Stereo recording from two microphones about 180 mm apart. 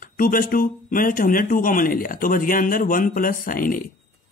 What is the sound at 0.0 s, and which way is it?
A man's voice, 50° left (ahead or behind).